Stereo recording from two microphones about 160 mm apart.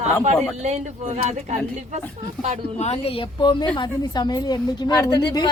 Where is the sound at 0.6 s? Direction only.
45° right (ahead or behind).